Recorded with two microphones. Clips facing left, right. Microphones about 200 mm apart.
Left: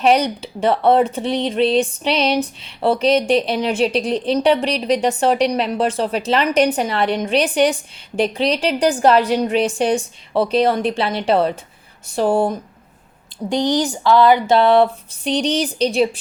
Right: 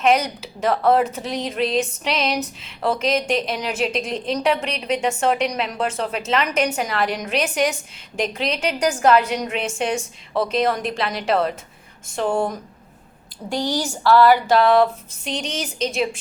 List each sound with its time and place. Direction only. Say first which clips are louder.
0.0 s a woman's voice: left 3 dB; 30° left (ahead or behind)
13.5 s speech: left 5 dB; 20° left (ahead or behind)